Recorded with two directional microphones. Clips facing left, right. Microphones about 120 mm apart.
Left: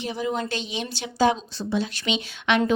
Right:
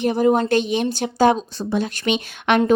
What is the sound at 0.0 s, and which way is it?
Speech, 50° right (ahead or behind).